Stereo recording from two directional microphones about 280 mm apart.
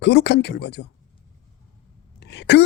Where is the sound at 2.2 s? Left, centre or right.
Left.